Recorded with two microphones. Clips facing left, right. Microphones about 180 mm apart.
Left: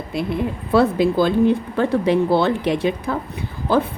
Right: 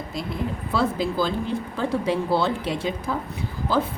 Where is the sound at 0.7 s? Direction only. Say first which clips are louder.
Left 9 dB; 60° left (ahead or behind).